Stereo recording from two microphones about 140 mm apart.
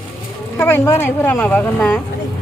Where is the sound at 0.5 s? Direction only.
15° left (ahead or behind).